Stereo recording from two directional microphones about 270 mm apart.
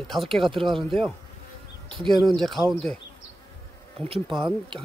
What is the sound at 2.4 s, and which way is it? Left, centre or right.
Speech, centre.